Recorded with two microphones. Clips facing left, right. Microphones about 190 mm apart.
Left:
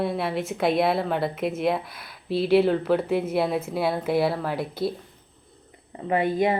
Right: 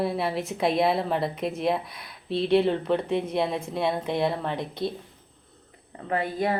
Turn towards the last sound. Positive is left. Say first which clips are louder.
# left 4 dB
turn(degrees=15)  # may be behind; listen again after turning